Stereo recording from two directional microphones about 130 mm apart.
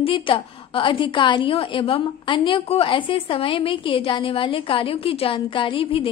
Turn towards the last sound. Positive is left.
turn(degrees=40)  # may be behind; listen again after turning